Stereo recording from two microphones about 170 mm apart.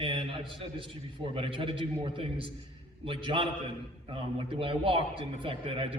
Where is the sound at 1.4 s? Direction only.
30° right (ahead or behind).